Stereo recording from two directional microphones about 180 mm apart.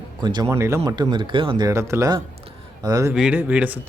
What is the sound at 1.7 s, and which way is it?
Speech, 15° right (ahead or behind).